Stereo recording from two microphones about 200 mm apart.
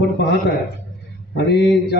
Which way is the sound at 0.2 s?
55° left (ahead or behind).